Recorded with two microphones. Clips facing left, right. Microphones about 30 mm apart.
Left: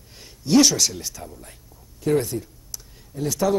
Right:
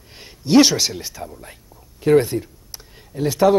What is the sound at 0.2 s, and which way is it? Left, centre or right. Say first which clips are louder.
Speech: right 3 dB; right.